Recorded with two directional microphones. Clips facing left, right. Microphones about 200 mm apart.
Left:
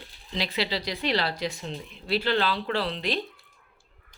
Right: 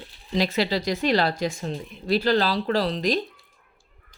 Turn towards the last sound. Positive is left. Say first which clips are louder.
# right 5 dB
turn(degrees=-40)  # may be behind; listen again after turning